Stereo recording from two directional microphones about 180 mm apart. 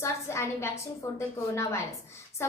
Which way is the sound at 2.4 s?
15° left (ahead or behind).